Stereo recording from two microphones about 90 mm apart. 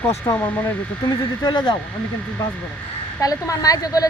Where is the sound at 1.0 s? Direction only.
50° left (ahead or behind).